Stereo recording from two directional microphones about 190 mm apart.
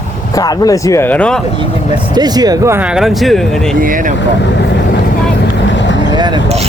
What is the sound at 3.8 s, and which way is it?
Speech, 45° right (ahead or behind).